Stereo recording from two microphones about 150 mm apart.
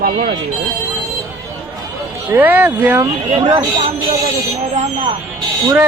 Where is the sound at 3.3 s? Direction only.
30° right (ahead or behind).